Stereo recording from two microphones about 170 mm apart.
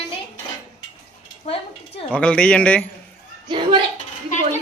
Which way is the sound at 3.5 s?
30° right (ahead or behind).